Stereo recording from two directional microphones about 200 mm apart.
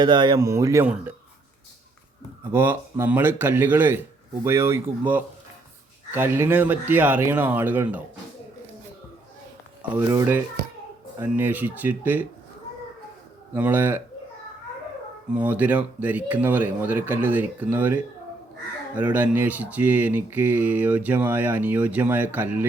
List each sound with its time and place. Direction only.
0.0 s speech: 20° right (ahead or behind)
2.5 s speech: 10° right (ahead or behind)
9.9 s speech: 15° right (ahead or behind)
13.5 s speech: 10° right (ahead or behind)
15.3 s speech: 5° right (ahead or behind)